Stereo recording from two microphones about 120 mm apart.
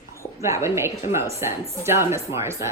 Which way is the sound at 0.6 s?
20° right (ahead or behind).